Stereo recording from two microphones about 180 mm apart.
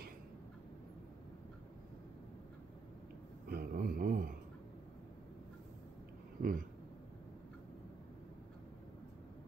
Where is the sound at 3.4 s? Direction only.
55° right (ahead or behind).